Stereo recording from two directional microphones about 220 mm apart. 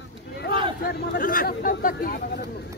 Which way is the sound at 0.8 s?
45° left (ahead or behind).